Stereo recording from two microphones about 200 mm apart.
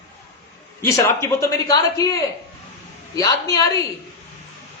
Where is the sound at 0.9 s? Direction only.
15° left (ahead or behind).